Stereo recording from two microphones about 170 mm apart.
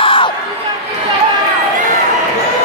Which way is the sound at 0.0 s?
30° left (ahead or behind).